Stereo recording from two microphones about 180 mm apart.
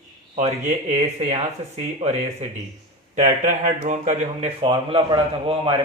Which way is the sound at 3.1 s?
45° right (ahead or behind).